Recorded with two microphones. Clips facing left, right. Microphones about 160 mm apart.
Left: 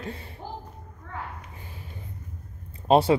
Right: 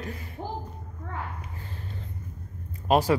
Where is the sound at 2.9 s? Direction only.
25° left (ahead or behind).